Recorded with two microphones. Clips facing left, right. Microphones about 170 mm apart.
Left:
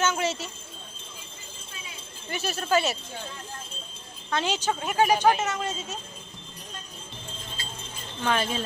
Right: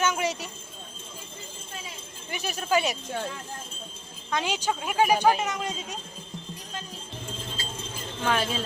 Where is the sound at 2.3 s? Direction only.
15° right (ahead or behind).